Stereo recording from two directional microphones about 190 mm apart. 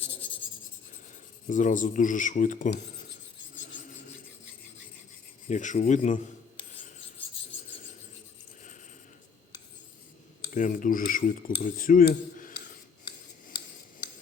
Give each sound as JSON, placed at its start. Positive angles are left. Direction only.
{"t": 1.5, "sound": "speech", "side_deg": 40}
{"t": 5.5, "sound": "speech", "side_deg": 40}
{"t": 10.5, "sound": "speech", "side_deg": 45}